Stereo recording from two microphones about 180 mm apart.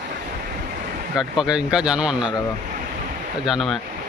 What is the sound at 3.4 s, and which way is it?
Speech, centre (ahead or behind).